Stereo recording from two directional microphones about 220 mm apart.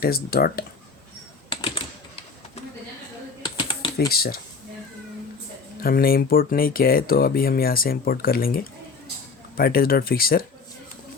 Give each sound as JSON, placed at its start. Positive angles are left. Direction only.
{"t": 0.0, "sound": "speech", "side_deg": 45}
{"t": 1.5, "sound": "typing", "side_deg": 25}
{"t": 3.4, "sound": "typing", "side_deg": 20}
{"t": 4.1, "sound": "speech", "side_deg": 45}
{"t": 5.8, "sound": "speech", "side_deg": 40}